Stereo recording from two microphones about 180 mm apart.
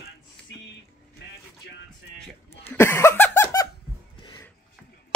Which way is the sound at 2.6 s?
15° left (ahead or behind).